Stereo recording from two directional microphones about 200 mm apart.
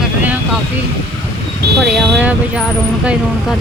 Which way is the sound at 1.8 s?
5° right (ahead or behind).